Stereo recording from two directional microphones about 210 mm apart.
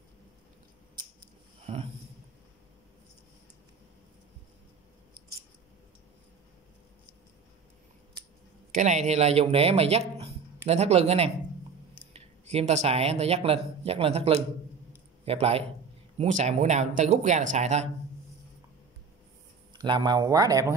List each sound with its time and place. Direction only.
1.7 s a sound: 30° right (ahead or behind)
8.7 s speech: 35° right (ahead or behind)
19.7 s speech: 20° right (ahead or behind)